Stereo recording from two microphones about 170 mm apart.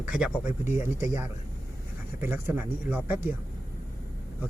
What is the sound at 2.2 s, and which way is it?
Speech, 15° right (ahead or behind).